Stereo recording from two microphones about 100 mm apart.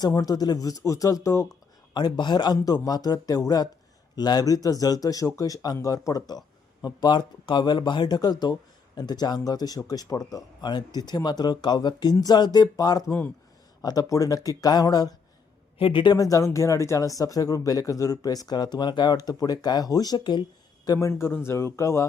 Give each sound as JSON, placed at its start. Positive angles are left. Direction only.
{"t": 0.1, "sound": "speech", "side_deg": 40}
{"t": 1.9, "sound": "a man's voice", "side_deg": 45}
{"t": 15.8, "sound": "speech", "side_deg": 55}
{"t": 16.1, "sound": "a man's voice", "side_deg": 35}
{"t": 21.1, "sound": "speech", "side_deg": 25}